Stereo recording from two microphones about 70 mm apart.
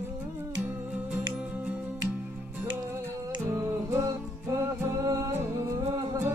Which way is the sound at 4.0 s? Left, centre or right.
Right.